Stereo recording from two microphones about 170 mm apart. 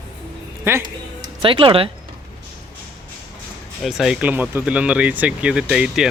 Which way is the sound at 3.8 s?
Centre (ahead or behind).